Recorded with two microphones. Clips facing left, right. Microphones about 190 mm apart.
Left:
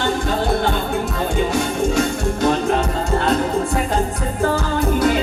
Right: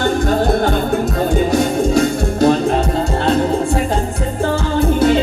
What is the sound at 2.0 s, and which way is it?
Music, 35° right (ahead or behind).